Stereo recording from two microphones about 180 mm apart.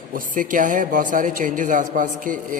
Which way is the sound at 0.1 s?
50° right (ahead or behind).